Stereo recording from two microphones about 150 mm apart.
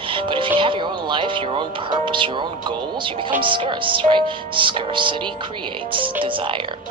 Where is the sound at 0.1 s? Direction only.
35° right (ahead or behind).